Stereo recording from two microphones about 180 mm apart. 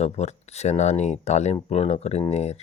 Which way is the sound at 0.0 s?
40° left (ahead or behind).